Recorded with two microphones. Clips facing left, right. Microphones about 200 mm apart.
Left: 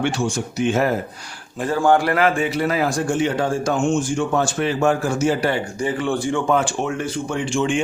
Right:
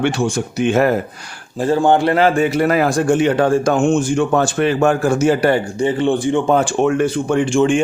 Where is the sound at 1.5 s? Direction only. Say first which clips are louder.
Right 3 dB; 30° right (ahead or behind).